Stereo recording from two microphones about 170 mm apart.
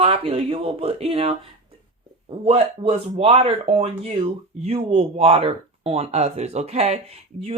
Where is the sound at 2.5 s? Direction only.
35° right (ahead or behind).